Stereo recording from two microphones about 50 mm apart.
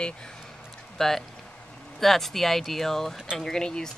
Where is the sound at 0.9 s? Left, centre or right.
Centre.